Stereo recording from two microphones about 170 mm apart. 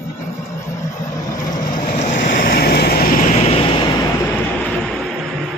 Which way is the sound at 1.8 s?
50° left (ahead or behind).